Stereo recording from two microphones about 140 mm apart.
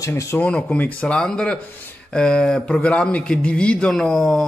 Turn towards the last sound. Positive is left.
turn(degrees=5)  # may be behind; listen again after turning